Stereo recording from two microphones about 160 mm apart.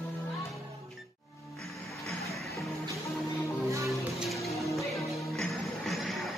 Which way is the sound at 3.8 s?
Centre (ahead or behind).